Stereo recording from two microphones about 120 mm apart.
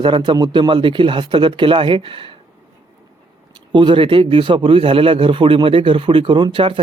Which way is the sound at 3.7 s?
45° right (ahead or behind).